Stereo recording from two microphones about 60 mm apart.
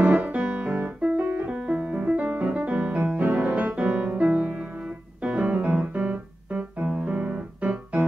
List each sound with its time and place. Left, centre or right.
0.0 s piano: right